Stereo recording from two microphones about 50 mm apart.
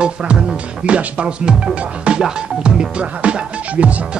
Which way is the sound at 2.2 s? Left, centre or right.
Centre.